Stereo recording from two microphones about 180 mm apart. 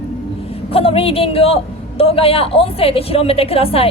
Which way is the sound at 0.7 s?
30° left (ahead or behind).